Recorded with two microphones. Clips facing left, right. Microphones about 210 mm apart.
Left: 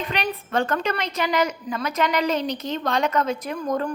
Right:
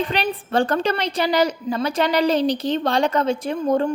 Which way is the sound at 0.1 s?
30° right (ahead or behind).